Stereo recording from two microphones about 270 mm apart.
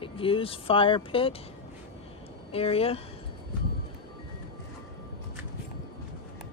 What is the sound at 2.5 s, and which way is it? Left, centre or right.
Speech, left.